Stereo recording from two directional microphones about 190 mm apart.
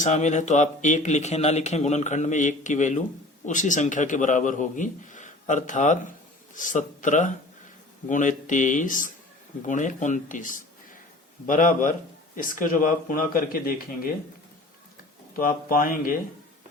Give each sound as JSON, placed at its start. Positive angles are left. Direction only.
{"t": 0.0, "sound": "a man's voice", "side_deg": 40}
{"t": 15.4, "sound": "speech", "side_deg": 50}